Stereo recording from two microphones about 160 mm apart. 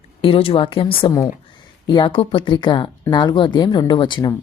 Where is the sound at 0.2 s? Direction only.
35° left (ahead or behind).